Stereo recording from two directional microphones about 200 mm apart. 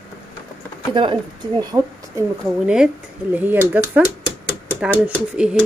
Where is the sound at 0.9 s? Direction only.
25° right (ahead or behind).